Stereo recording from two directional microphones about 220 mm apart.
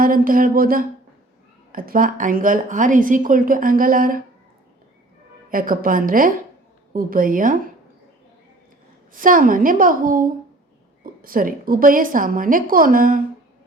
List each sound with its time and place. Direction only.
0.0 s a woman's voice: 40° right (ahead or behind)
5.5 s a woman's voice: 40° right (ahead or behind)
9.2 s a woman's voice: 40° right (ahead or behind)